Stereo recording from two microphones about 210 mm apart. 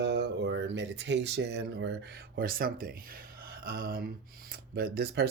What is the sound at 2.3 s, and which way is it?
Speech, 45° right (ahead or behind).